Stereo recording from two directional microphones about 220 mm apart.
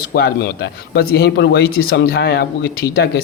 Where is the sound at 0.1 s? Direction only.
45° left (ahead or behind).